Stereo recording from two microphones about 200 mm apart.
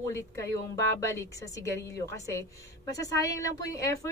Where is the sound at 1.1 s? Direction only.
15° left (ahead or behind).